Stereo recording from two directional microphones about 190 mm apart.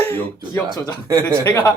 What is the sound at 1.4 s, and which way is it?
Speech, 15° left (ahead or behind).